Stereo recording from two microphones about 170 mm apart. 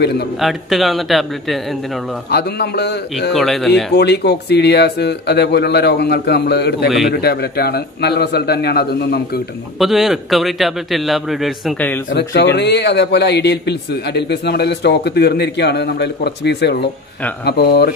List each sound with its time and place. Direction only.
0.4 s a man's voice: centre (ahead or behind)
2.3 s a man's voice: 75° left (ahead or behind)
3.3 s a man's voice: centre (ahead or behind)
3.9 s a man's voice: 75° left (ahead or behind)
9.8 s a man's voice: centre (ahead or behind)
12.1 s a man's voice: 80° left
12.5 s a man's voice: 90° left